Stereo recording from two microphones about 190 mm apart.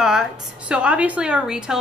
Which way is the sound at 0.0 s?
5° right (ahead or behind).